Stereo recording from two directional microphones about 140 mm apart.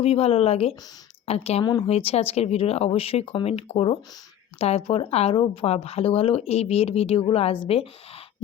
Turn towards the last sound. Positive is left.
turn(degrees=40)  # may be behind; listen again after turning